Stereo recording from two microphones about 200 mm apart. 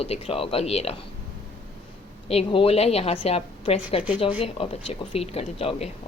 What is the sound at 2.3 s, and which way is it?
Speech, 30° left (ahead or behind).